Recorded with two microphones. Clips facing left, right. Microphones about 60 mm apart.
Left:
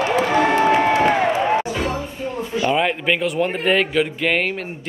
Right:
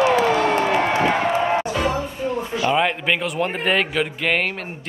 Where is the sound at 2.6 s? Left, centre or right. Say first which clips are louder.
Left 1 dB; centre.